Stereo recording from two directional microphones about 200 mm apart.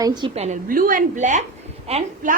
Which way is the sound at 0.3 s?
35° right (ahead or behind).